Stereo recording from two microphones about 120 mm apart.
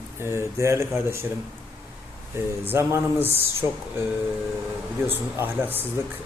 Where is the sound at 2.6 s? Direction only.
20° right (ahead or behind).